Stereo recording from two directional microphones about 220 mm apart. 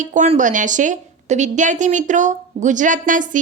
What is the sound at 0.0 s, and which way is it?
A woman's voice, 35° right (ahead or behind).